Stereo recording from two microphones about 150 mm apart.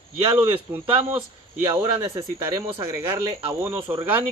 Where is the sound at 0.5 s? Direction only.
35° right (ahead or behind).